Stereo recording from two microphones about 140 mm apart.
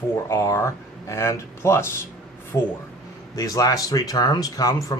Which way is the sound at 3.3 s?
25° left (ahead or behind).